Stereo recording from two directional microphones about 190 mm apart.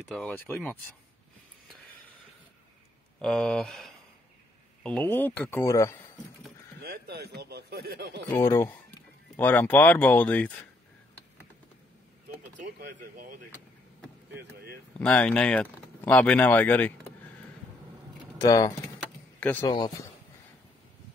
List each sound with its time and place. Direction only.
0.1 s speech: 5° left (ahead or behind)
3.2 s speech: 5° left (ahead or behind)
6.8 s speech: 60° right (ahead or behind)
8.3 s speech: 10° left (ahead or behind)
12.6 s speech: 50° right (ahead or behind)
14.3 s vehicle: 55° right (ahead or behind)
15.0 s speech: 5° left (ahead or behind)
18.4 s speech: 20° left (ahead or behind)